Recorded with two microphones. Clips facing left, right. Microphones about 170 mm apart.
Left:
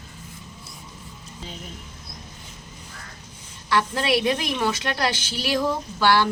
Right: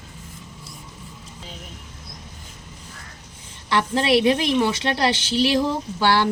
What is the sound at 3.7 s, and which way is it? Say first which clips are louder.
A woman's voice: right 3 dB; 25° right (ahead or behind).